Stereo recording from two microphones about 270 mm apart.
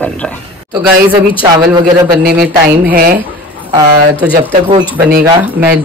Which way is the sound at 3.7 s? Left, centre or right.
Centre.